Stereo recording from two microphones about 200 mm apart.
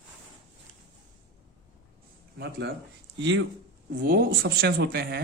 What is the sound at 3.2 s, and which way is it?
Speech, 65° right (ahead or behind).